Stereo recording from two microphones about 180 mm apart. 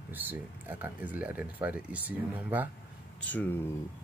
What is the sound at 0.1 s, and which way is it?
Speech, 10° right (ahead or behind).